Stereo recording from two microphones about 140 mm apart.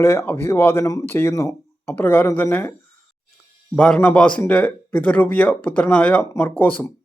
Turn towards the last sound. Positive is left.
turn(degrees=15)  # may be behind; listen again after turning